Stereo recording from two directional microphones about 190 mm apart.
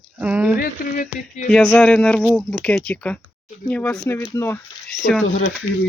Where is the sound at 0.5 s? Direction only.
45° left (ahead or behind).